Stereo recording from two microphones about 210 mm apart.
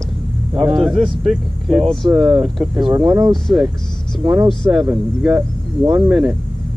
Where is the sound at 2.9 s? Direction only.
20° right (ahead or behind).